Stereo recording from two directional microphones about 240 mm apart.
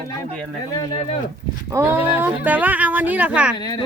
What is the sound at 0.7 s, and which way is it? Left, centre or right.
Speech, centre.